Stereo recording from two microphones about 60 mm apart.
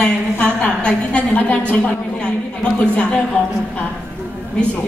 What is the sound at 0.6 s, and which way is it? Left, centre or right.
Speech, centre.